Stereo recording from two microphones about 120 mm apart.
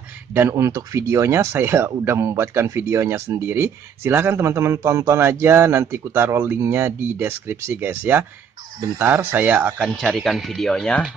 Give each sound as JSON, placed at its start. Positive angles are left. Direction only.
{"t": 0.3, "sound": "speech", "side_deg": -20}
{"t": 9.8, "sound": "speech", "side_deg": 0}